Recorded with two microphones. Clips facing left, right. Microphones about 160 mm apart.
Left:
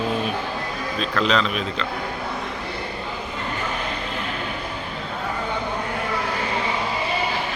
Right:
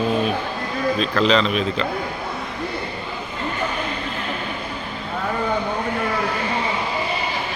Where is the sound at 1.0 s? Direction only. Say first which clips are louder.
Right 2 dB; centre (ahead or behind).